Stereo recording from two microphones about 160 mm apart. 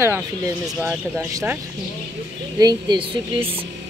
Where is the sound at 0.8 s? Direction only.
15° right (ahead or behind).